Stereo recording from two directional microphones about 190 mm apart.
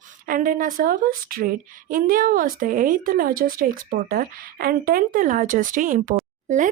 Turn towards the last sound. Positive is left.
turn(degrees=-40)  # may be behind; listen again after turning